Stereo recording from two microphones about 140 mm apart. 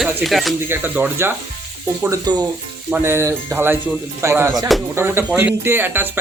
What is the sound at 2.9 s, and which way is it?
Speech, 20° right (ahead or behind).